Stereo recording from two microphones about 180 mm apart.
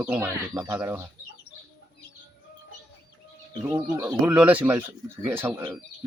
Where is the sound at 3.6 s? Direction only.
10° right (ahead or behind).